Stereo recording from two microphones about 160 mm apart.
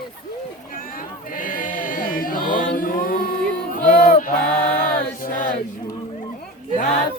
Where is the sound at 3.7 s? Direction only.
60° left (ahead or behind).